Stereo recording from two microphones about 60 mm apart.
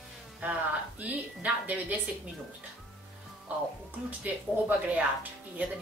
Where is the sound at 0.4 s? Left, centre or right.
Right.